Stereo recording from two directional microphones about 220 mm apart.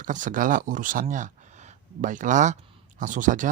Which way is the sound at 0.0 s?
35° right (ahead or behind).